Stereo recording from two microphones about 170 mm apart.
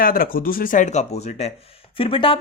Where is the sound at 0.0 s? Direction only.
55° left (ahead or behind).